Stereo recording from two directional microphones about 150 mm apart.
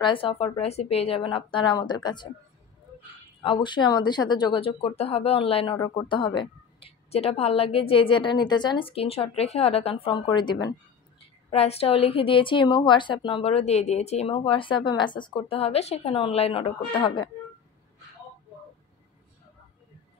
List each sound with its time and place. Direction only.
0.0 s a woman's voice: 35° left (ahead or behind)
3.4 s a woman's voice: 30° left (ahead or behind)
11.1 s a woman's voice: 40° left (ahead or behind)